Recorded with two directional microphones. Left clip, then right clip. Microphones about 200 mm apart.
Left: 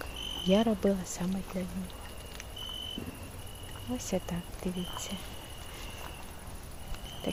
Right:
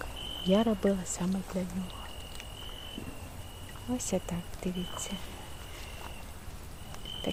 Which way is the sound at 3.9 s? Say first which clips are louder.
Right 1 dB; 10° right (ahead or behind).